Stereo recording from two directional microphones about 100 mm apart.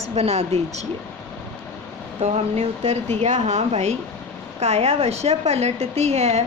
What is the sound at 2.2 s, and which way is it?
A woman's voice, 90° right.